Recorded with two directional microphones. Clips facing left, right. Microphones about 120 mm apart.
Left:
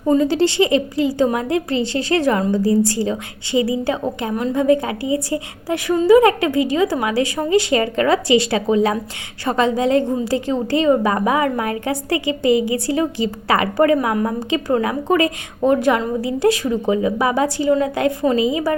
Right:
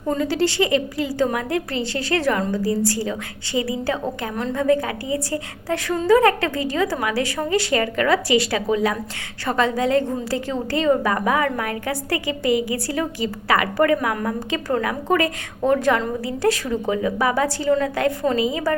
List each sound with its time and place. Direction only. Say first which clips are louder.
0.2 s a woman's voice: left 4 dB; 20° left (ahead or behind)